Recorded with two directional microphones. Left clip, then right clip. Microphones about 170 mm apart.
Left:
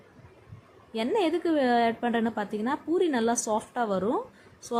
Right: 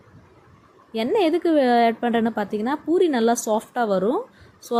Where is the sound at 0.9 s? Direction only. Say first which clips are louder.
Right 6 dB; 15° right (ahead or behind).